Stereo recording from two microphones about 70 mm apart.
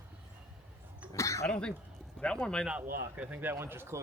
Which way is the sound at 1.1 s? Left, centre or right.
Left.